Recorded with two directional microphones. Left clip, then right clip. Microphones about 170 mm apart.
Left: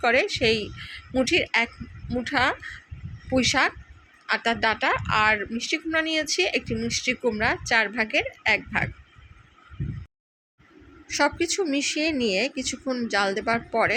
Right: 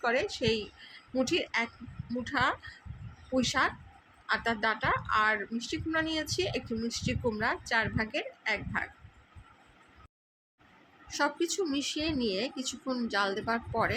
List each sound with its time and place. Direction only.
0.0 s speech: 20° left (ahead or behind)
11.1 s speech: 20° left (ahead or behind)